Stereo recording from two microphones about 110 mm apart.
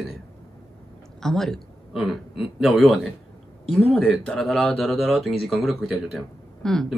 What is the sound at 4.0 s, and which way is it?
Speech, 5° left (ahead or behind).